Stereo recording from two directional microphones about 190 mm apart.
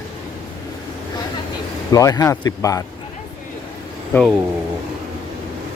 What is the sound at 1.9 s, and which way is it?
Speech, 20° left (ahead or behind).